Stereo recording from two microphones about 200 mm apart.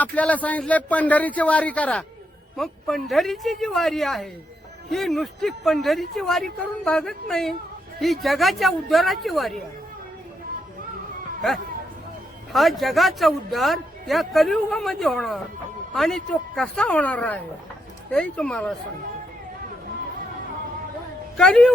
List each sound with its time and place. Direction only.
0.0 s a man's voice: 5° left (ahead or behind)
12.5 s a man's voice: centre (ahead or behind)
21.3 s a man's voice: 5° left (ahead or behind)